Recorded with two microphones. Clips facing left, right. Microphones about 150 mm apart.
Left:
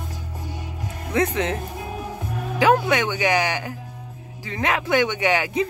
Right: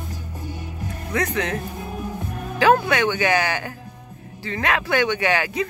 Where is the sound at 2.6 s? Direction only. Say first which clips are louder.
Right 1 dB; 15° left (ahead or behind).